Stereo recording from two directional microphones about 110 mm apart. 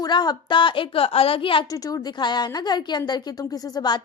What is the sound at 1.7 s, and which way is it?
A woman's voice, 30° left (ahead or behind).